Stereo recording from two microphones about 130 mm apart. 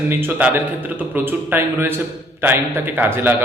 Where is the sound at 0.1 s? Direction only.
15° right (ahead or behind).